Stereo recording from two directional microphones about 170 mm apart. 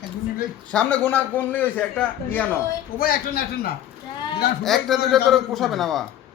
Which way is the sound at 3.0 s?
60° left (ahead or behind).